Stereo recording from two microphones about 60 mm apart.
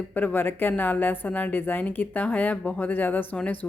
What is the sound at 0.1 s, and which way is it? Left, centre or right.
A woman's voice, left.